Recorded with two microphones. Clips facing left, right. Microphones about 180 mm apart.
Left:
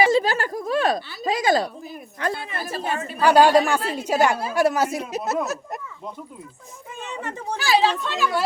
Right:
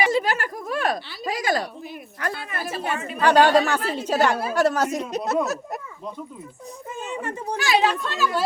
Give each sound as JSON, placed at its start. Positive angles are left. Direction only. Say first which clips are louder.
{"t": 0.0, "sound": "a sound", "louder": "left 3 dB", "side_deg": 30}
{"t": 2.2, "sound": "speech", "louder": "left 3 dB", "side_deg": 25}
{"t": 2.6, "sound": "a woman's voice", "louder": "even", "side_deg": 40}
{"t": 3.2, "sound": "a woman's voice", "louder": "left 1 dB", "side_deg": 10}
{"t": 7.6, "sound": "speech", "louder": "left 1 dB", "side_deg": 30}